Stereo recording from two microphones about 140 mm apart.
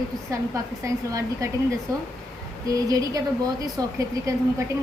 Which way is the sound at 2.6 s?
25° right (ahead or behind).